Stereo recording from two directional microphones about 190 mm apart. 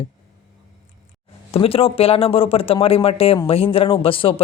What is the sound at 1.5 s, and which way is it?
Speech, 30° left (ahead or behind).